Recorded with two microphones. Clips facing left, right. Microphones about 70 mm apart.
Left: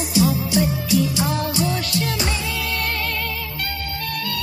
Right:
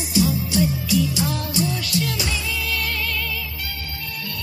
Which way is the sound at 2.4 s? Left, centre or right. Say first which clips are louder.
Left 1 dB; left.